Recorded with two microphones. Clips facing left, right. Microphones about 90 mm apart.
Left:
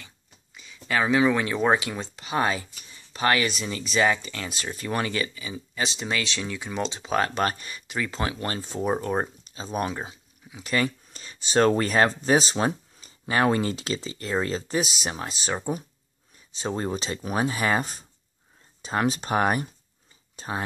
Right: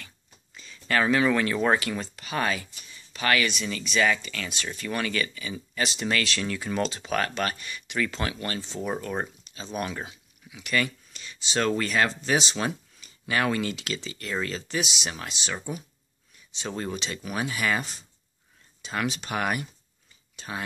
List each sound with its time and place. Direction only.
0.6 s speech: 10° left (ahead or behind); by 8.5 s 30° left (ahead or behind)
8.5 s speech: 45° left (ahead or behind)
8.8 s speech: 30° left (ahead or behind)
16.5 s speech: 30° left (ahead or behind)